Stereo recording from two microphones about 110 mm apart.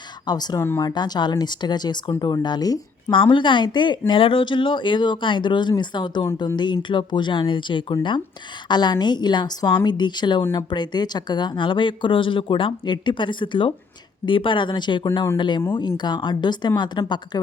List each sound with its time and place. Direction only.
0.3 s speech: 40° left (ahead or behind)
3.1 s speech: 50° left (ahead or behind)